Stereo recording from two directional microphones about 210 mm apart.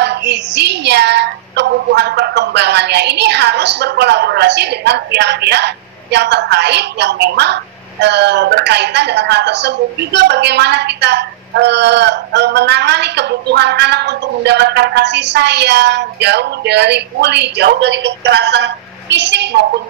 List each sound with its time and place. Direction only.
0.0 s child singing: 55° right (ahead or behind)